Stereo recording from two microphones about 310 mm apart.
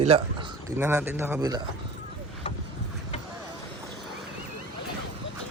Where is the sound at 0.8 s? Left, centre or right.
Centre.